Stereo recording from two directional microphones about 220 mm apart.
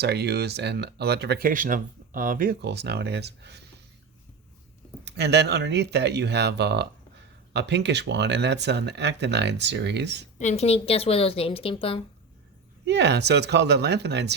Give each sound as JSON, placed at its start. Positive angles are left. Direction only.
{"t": 0.0, "sound": "speech", "side_deg": -50}
{"t": 5.0, "sound": "speech", "side_deg": -50}
{"t": 10.3, "sound": "a woman's voice", "side_deg": 30}
{"t": 12.8, "sound": "speech", "side_deg": -50}